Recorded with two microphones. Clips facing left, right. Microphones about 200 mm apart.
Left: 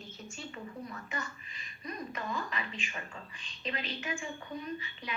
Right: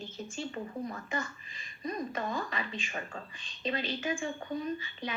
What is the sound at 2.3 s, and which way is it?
Speech, 35° right (ahead or behind).